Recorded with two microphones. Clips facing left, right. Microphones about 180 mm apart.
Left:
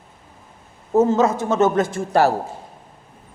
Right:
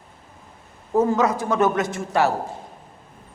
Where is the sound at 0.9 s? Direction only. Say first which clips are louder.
Left 3 dB; 25° left (ahead or behind).